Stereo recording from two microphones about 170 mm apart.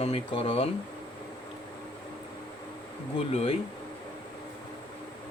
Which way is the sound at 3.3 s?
35° left (ahead or behind).